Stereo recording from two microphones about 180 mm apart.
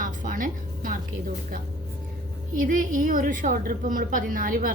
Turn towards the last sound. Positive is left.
turn(degrees=-50)  # may be behind; listen again after turning